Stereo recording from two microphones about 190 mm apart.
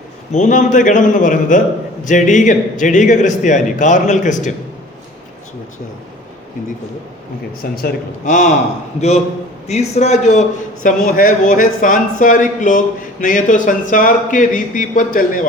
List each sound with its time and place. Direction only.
0.3 s a man's voice: 40° left (ahead or behind)
7.6 s a man's voice: 50° left (ahead or behind)